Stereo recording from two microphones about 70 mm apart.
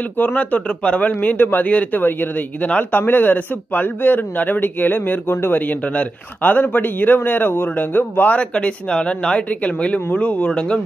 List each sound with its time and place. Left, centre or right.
0.2 s speech: left
8.4 s speech: centre